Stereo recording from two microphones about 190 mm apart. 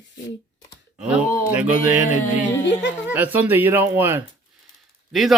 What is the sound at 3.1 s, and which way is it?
Speech, 10° right (ahead or behind).